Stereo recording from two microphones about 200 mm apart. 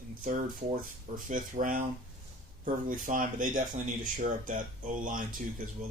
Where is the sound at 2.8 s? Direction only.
40° right (ahead or behind).